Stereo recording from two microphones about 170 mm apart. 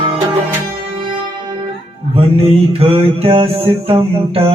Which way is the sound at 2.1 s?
35° right (ahead or behind).